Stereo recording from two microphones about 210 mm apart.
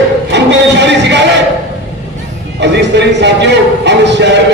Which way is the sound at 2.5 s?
55° right (ahead or behind).